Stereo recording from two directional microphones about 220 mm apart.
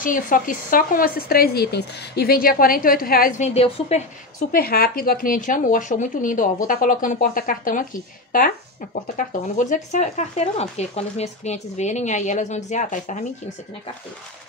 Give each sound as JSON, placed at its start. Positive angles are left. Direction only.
{"t": 0.0, "sound": "speech", "side_deg": 35}
{"t": 4.5, "sound": "speech", "side_deg": 45}